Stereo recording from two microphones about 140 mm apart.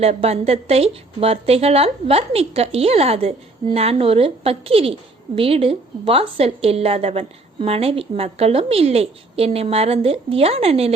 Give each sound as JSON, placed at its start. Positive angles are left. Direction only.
{"t": 0.0, "sound": "a woman's voice", "side_deg": -45}